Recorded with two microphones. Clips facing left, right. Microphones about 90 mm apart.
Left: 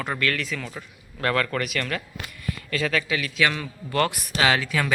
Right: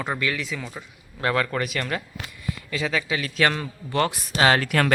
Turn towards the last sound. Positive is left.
turn(degrees=-55)  # may be behind; listen again after turning